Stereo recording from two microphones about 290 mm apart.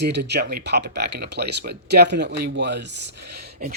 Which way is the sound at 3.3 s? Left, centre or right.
Right.